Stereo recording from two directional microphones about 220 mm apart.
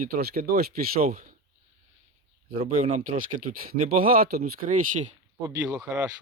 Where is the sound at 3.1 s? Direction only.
40° right (ahead or behind).